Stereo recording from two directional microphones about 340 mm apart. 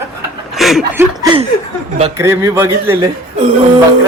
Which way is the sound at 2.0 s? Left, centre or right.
Centre.